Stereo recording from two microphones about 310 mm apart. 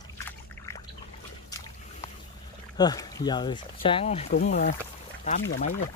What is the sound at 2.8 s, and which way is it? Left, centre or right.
Speech, centre.